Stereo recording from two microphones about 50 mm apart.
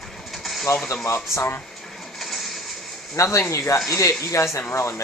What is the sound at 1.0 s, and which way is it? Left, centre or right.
Speech, left.